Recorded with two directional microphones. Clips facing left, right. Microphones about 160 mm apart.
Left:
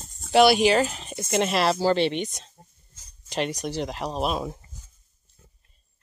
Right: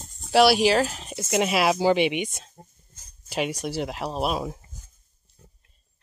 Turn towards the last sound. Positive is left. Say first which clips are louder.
# even
turn(degrees=-5)  # may be behind; listen again after turning